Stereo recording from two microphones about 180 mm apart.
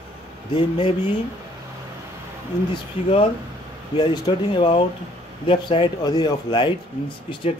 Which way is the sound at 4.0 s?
25° left (ahead or behind).